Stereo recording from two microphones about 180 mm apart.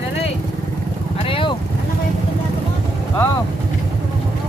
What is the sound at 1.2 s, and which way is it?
Vehicle, 30° left (ahead or behind).